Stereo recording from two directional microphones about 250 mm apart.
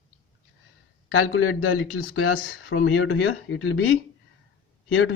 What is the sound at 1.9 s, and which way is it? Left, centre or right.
Speech, left.